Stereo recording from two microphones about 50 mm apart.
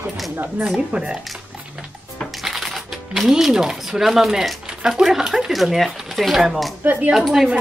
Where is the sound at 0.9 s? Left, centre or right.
Right.